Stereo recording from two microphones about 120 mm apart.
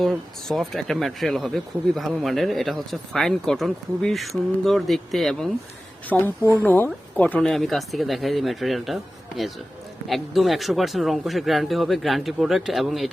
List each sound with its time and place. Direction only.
0.0 s speech: centre (ahead or behind)
6.1 s a woman's voice: 20° left (ahead or behind); by 13.1 s centre (ahead or behind)